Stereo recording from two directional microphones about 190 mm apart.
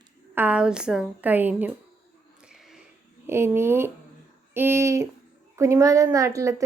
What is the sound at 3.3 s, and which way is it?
Speech, 15° right (ahead or behind).